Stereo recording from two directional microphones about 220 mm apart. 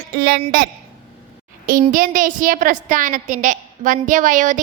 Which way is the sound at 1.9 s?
35° right (ahead or behind).